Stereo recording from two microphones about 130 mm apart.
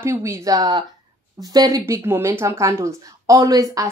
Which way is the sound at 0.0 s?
20° right (ahead or behind).